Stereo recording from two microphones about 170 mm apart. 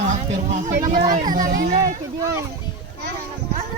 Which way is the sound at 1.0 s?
45° right (ahead or behind).